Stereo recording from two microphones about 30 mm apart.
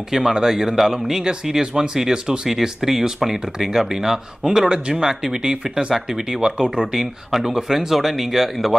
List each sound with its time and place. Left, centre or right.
0.3 s speech: centre
4.6 s speech: right
5.0 s speech: centre
6.9 s speech: centre